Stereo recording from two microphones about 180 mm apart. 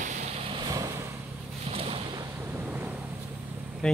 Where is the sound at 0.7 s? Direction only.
20° right (ahead or behind).